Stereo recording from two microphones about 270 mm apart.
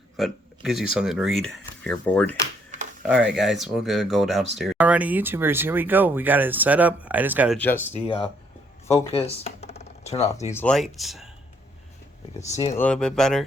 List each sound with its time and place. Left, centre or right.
0.2 s speech: centre
7.9 s speech: left
10.5 s speech: centre
12.5 s speech: centre